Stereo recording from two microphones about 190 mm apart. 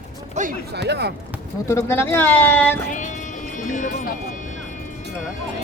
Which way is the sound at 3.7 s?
40° left (ahead or behind).